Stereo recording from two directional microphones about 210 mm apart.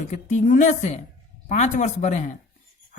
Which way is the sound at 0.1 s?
35° left (ahead or behind).